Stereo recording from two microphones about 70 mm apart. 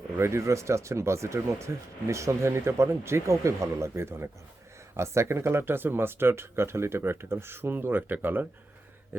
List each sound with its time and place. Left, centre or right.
0.2 s speech: right